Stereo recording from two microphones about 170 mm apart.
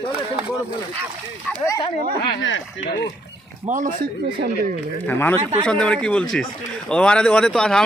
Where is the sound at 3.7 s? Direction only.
50° right (ahead or behind).